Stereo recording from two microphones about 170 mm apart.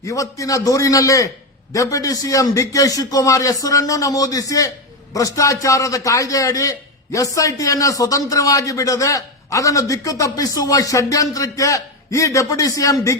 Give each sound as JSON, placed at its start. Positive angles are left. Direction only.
{"t": 0.0, "sound": "a man's voice", "side_deg": 20}